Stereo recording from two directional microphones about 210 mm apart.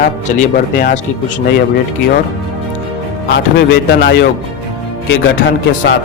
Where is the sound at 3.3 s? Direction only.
55° left (ahead or behind).